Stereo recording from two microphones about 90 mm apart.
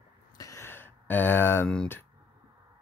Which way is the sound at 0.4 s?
35° left (ahead or behind).